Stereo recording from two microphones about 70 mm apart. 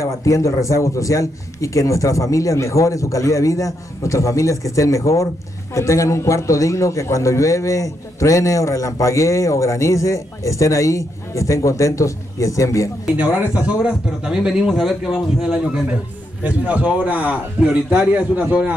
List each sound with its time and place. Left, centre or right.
0.0 s a man's voice: left
13.0 s a man's voice: centre
16.4 s a man's voice: centre